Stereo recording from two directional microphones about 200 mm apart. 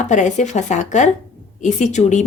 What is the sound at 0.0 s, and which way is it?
Speech, 35° left (ahead or behind).